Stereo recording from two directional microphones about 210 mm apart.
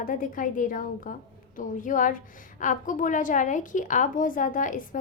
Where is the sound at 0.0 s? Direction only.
40° left (ahead or behind).